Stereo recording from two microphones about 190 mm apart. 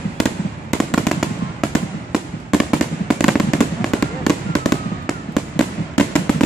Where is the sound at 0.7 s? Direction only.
Centre (ahead or behind).